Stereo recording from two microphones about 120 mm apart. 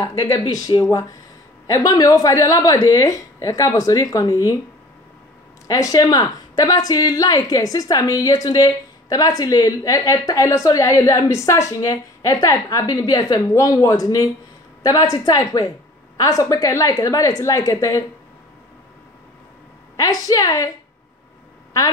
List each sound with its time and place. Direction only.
0.0 s a woman's voice: 35° left (ahead or behind)
5.7 s a woman's voice: 30° left (ahead or behind)
20.0 s a woman's voice: 30° left (ahead or behind)